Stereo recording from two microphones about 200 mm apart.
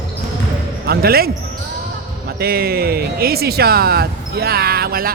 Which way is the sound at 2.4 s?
50° right (ahead or behind).